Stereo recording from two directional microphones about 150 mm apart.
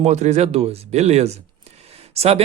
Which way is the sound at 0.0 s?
50° right (ahead or behind).